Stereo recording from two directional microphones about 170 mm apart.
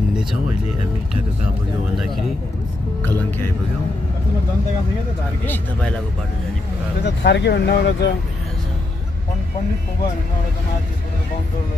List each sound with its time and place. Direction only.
2.0 s speech: centre (ahead or behind)
3.0 s speech: 10° left (ahead or behind)
5.5 s speech: 5° left (ahead or behind)
7.2 s speech: 85° left